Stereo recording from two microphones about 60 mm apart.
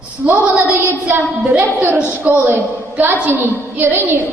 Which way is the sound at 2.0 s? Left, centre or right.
Right.